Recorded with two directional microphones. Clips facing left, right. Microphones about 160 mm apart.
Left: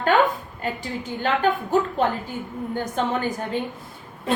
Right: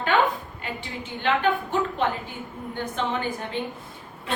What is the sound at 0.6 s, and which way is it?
Speech, 40° left (ahead or behind).